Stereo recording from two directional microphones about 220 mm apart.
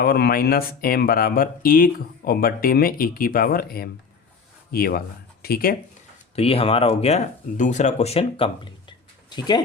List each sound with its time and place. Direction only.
0.0 s speech: 45° left (ahead or behind)
6.3 s speech: 25° left (ahead or behind)